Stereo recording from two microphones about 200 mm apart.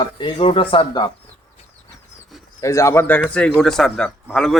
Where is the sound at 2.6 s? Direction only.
15° left (ahead or behind).